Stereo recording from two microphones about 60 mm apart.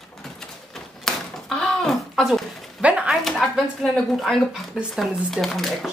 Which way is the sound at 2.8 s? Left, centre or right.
Centre.